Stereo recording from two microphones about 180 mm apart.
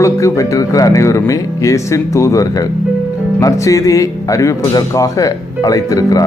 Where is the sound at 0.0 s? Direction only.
15° left (ahead or behind).